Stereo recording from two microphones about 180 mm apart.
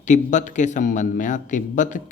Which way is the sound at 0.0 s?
45° left (ahead or behind).